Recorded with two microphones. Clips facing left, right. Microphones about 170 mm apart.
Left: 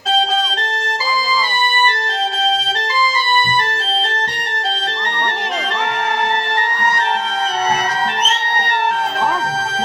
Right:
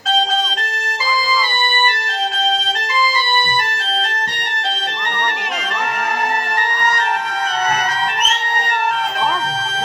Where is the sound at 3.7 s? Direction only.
30° left (ahead or behind).